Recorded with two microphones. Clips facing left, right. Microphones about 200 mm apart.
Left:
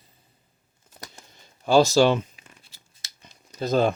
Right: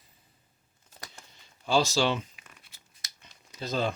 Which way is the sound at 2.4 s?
30° left (ahead or behind).